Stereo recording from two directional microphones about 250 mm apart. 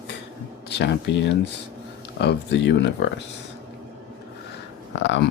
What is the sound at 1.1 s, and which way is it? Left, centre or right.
Speech, left.